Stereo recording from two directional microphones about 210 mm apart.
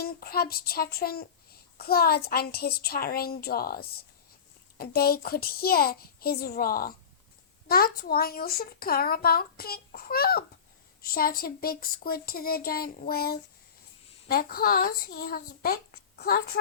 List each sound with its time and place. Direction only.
0.0 s speech: 45° left (ahead or behind)